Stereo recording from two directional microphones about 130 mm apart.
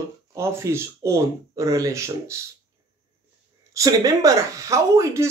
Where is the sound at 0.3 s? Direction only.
20° right (ahead or behind).